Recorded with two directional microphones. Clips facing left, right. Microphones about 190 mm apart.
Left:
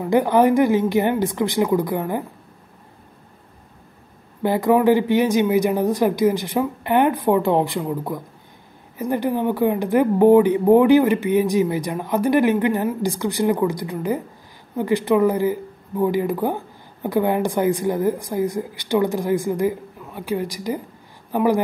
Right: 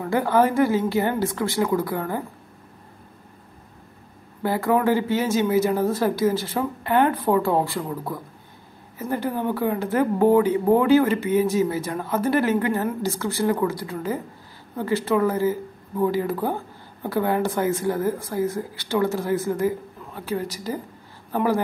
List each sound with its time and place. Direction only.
0.0 s speech: 15° left (ahead or behind)
4.4 s a woman's voice: 20° left (ahead or behind)